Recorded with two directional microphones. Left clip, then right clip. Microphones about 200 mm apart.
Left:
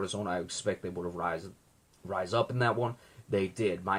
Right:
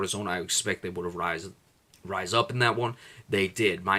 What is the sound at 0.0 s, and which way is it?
Speech, 20° right (ahead or behind).